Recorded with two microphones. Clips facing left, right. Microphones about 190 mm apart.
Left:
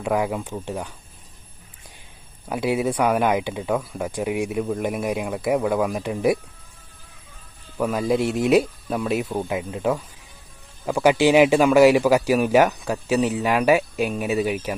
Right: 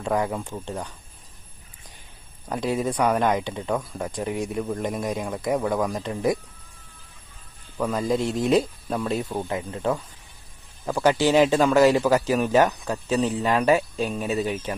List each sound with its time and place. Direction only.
0.0 s speech: 10° left (ahead or behind)
2.5 s speech: 10° left (ahead or behind)
7.8 s speech: 5° left (ahead or behind)